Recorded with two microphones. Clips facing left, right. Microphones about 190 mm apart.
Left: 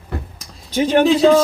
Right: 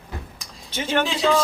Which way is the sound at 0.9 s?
40° left (ahead or behind).